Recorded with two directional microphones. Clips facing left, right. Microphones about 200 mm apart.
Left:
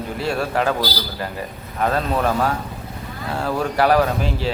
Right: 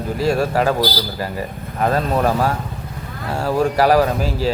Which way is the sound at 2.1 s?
10° right (ahead or behind).